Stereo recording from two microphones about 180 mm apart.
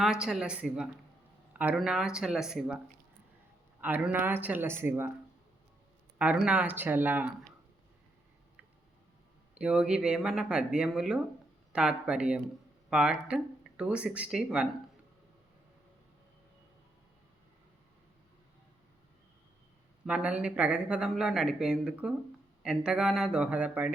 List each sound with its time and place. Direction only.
0.0 s speech: 5° right (ahead or behind)
6.1 s speech: 5° right (ahead or behind)
9.6 s speech: 5° right (ahead or behind)
20.1 s speech: 5° right (ahead or behind)